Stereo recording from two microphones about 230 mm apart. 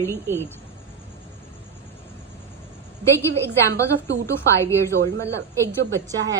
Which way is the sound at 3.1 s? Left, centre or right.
Centre.